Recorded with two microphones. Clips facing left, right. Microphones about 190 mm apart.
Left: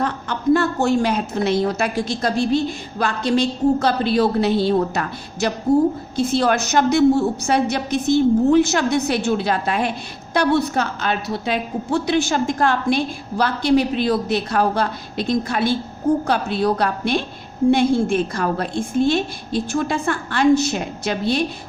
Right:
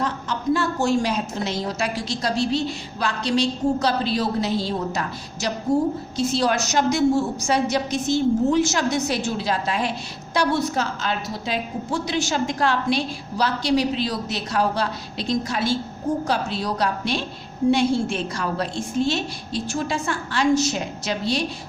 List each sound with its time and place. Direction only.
0.0 s a woman's voice: 55° left (ahead or behind)